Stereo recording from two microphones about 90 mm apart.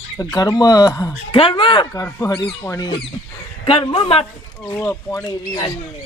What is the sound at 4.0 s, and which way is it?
Speech, 90° left.